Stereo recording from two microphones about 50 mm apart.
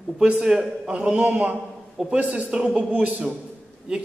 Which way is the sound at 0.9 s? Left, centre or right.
Right.